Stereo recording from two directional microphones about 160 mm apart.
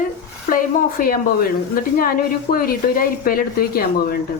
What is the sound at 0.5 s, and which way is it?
A woman's voice, 65° left (ahead or behind).